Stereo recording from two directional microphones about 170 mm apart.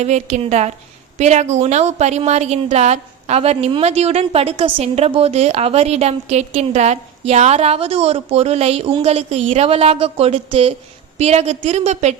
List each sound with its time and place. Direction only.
0.0 s a woman's voice: 40° right (ahead or behind)